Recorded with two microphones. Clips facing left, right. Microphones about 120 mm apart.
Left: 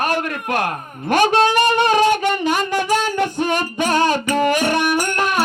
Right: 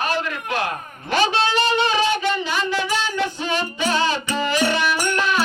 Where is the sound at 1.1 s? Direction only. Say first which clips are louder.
Left 5 dB; 50° left (ahead or behind).